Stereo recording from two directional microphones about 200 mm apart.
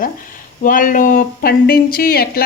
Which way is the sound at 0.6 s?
45° left (ahead or behind).